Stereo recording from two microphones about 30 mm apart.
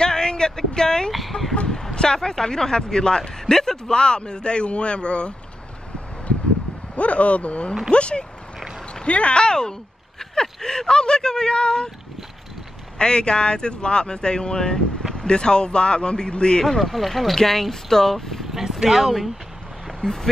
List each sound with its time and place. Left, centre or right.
0.0 s a sound: left
1.3 s speech: left
2.0 s speech: left
3.5 s speech: centre
3.9 s speech: left
7.0 s speech: left
9.4 s speech: left
13.0 s speech: left
16.6 s speech: centre
18.4 s vehicle: centre
20.0 s speech: centre